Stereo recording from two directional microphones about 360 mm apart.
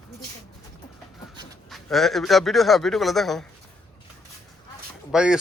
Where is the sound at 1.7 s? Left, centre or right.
Centre.